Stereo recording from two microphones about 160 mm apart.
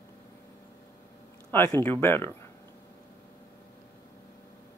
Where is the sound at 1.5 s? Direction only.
15° left (ahead or behind).